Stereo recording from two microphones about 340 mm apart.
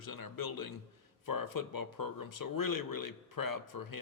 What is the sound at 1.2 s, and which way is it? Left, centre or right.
A man's voice, left.